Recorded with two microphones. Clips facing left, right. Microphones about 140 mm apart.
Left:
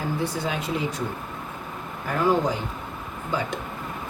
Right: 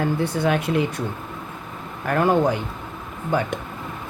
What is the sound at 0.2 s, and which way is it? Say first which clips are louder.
Speech: right 6 dB; 60° right (ahead or behind).